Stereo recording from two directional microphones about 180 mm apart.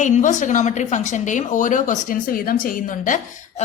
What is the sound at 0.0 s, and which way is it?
Speech, 45° left (ahead or behind).